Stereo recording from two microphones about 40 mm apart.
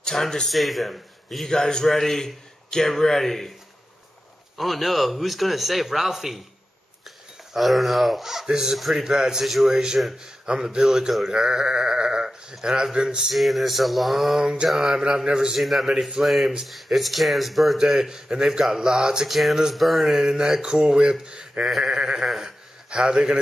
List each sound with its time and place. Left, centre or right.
0.0 s speech: centre
0.5 s speech: centre
1.4 s a man's voice: centre
4.6 s a man's voice: centre
7.5 s a man's voice: centre
8.7 s a man's voice: centre
9.0 s speech: centre
13.3 s a man's voice: centre
14.4 s speech: right
15.5 s a man's voice: centre
17.7 s speech: centre
19.2 s a man's voice: centre; by 21.6 s right
21.6 s speech: centre
22.8 s speech: centre